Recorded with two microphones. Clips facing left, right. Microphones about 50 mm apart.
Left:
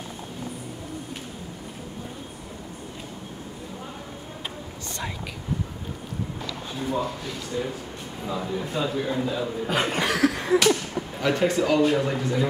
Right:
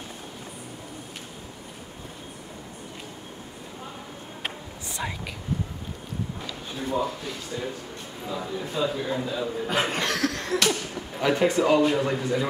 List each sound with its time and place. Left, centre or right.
6.9 s a man's voice: centre
11.2 s speech: centre